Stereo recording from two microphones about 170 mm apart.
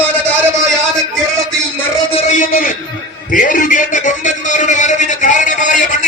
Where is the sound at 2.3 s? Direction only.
50° left (ahead or behind).